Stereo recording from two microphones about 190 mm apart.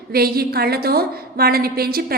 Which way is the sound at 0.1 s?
55° right (ahead or behind).